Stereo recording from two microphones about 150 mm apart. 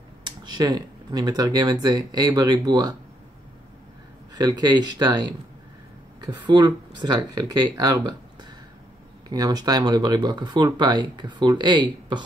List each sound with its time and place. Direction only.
0.2 s speech: 30° right (ahead or behind)
4.4 s speech: 25° right (ahead or behind)
9.3 s speech: 25° right (ahead or behind)